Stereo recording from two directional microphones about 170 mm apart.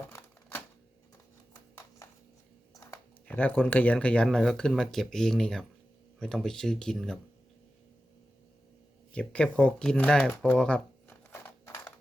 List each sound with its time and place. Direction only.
0.1 s typewriter: 15° left (ahead or behind)
2.7 s speech: 20° left (ahead or behind); by 7.2 s centre (ahead or behind)
9.1 s speech: 5° left (ahead or behind)
11.3 s horse: 15° left (ahead or behind)